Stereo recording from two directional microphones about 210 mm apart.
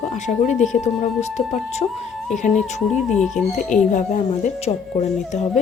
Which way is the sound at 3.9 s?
35° left (ahead or behind).